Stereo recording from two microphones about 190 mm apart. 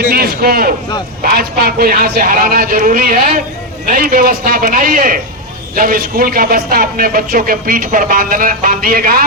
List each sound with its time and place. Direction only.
0.1 s a man's voice: 55° right (ahead or behind)